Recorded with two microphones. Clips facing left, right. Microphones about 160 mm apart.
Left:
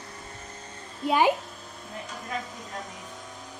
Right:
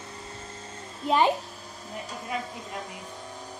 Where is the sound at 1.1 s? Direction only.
10° left (ahead or behind).